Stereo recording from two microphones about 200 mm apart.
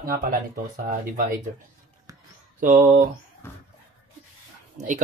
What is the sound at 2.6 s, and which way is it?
Speech, 40° right (ahead or behind).